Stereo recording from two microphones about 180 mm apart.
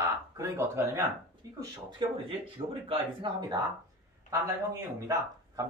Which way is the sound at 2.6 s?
30° right (ahead or behind).